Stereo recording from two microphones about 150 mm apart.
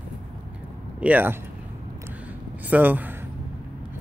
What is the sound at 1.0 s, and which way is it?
Speech, 10° right (ahead or behind).